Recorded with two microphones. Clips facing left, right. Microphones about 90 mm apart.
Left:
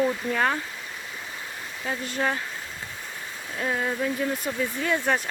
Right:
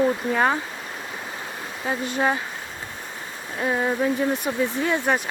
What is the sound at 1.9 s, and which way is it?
Speech, 20° right (ahead or behind).